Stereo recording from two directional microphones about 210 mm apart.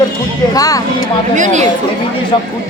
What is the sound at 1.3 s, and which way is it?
Speech, 35° right (ahead or behind).